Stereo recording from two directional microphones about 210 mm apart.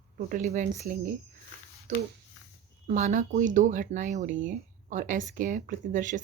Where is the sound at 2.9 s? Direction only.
35° right (ahead or behind).